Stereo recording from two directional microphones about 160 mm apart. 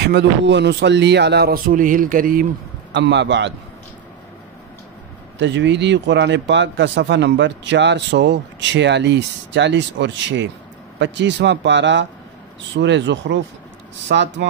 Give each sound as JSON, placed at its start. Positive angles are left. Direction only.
{"t": 0.0, "sound": "speech", "side_deg": -90}
{"t": 2.9, "sound": "speech", "side_deg": -90}
{"t": 5.4, "sound": "speech", "side_deg": -90}